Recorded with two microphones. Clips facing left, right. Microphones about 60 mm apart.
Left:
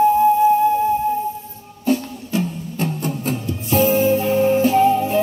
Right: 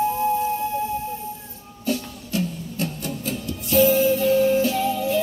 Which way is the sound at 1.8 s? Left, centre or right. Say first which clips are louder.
Left 6 dB; left.